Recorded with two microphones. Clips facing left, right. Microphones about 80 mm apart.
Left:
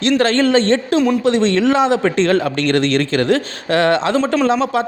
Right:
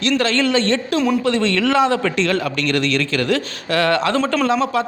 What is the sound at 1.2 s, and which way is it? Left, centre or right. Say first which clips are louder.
Speech: left 4 dB; left.